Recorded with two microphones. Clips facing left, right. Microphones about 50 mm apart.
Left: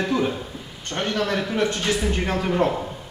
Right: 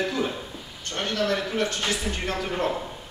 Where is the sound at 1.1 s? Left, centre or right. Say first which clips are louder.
Even; centre.